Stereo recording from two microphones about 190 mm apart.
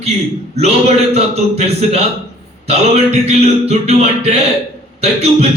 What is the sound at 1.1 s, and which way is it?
Speech, 35° right (ahead or behind).